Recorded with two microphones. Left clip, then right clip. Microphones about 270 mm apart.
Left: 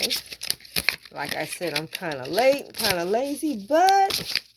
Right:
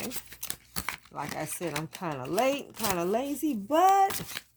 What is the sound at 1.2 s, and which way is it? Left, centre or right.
Speech, right.